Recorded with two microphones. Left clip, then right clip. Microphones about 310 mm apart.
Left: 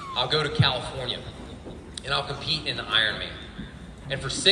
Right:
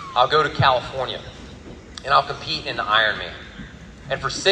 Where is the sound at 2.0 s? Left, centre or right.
Centre.